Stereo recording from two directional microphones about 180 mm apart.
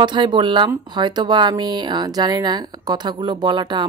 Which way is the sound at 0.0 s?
25° right (ahead or behind).